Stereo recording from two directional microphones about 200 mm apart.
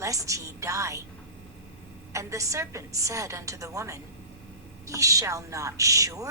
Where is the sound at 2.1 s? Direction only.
15° right (ahead or behind).